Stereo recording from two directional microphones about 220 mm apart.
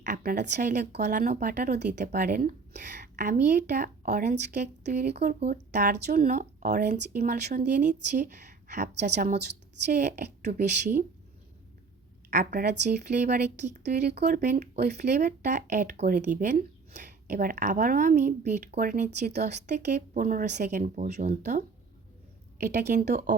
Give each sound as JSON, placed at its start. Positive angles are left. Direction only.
{"t": 0.0, "sound": "a woman's voice", "side_deg": -40}
{"t": 0.9, "sound": "speech", "side_deg": -45}
{"t": 4.8, "sound": "a woman's voice", "side_deg": -45}
{"t": 5.5, "sound": "speech", "side_deg": -35}
{"t": 8.9, "sound": "a woman's voice", "side_deg": -50}
{"t": 9.9, "sound": "speech", "side_deg": -35}
{"t": 12.3, "sound": "speech", "side_deg": -40}
{"t": 13.1, "sound": "speech", "side_deg": -30}
{"t": 13.8, "sound": "a woman's voice", "side_deg": -50}
{"t": 14.3, "sound": "speech", "side_deg": -35}
{"t": 15.1, "sound": "speech", "side_deg": -35}
{"t": 22.6, "sound": "a woman's voice", "side_deg": -45}